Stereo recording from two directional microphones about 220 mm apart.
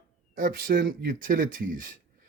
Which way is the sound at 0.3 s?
40° right (ahead or behind).